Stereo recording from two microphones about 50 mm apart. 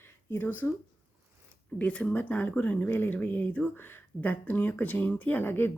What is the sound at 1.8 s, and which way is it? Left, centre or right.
Speech, left.